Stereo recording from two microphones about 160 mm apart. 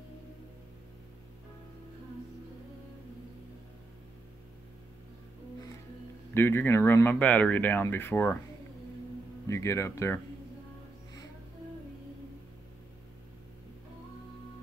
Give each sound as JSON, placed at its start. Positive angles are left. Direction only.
{"t": 6.3, "sound": "speech", "side_deg": 15}
{"t": 9.5, "sound": "speech", "side_deg": 20}